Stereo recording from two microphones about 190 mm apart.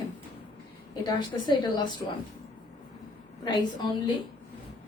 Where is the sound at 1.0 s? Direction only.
25° left (ahead or behind).